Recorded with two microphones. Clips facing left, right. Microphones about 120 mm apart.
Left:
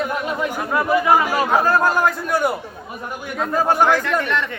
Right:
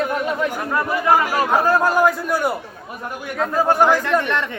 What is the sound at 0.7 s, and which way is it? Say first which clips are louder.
Speech: left 2 dB; 5° left (ahead or behind).